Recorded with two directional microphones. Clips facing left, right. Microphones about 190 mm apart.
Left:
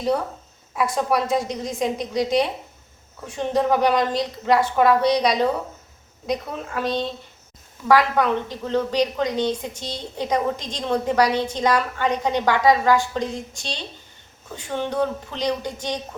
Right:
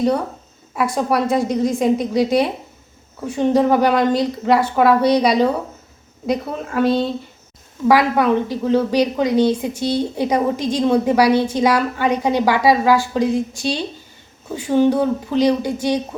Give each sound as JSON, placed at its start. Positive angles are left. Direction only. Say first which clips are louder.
{"t": 0.7, "sound": "a woman's voice", "louder": "right 3 dB", "side_deg": 0}